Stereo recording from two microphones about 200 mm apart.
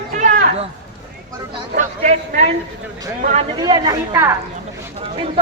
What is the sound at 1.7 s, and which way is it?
A man's voice, 40° right (ahead or behind).